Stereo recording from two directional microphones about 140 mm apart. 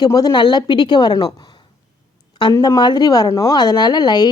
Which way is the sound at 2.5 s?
25° left (ahead or behind).